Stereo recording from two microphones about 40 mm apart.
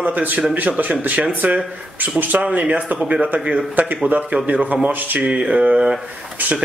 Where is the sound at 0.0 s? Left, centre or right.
Right.